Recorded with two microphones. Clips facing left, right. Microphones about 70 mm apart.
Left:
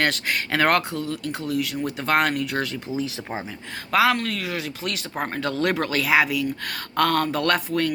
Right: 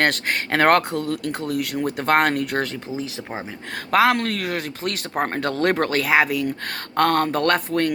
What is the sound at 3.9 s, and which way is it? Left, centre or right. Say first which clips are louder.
Speech: right 2 dB; right.